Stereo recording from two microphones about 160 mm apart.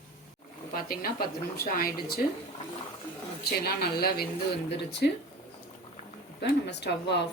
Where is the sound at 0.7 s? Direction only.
65° left (ahead or behind).